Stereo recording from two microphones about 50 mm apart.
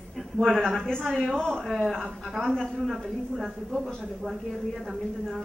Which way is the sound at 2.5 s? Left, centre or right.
Centre.